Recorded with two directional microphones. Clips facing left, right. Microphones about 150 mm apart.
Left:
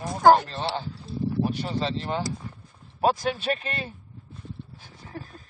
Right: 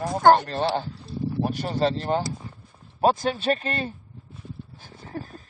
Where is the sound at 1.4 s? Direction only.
45° right (ahead or behind).